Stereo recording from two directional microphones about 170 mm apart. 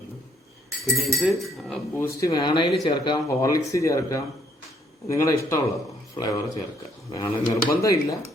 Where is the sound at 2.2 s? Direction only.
25° left (ahead or behind).